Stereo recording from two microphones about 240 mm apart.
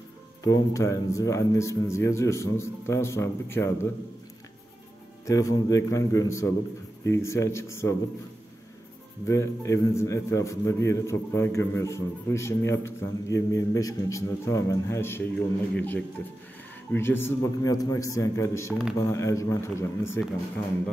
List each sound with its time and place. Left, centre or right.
0.4 s a man's voice: centre
5.2 s a man's voice: centre
9.3 s a man's voice: centre